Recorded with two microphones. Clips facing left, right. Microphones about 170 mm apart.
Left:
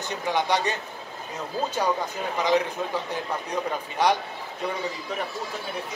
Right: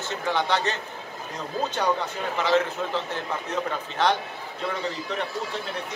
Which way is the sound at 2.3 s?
15° left (ahead or behind).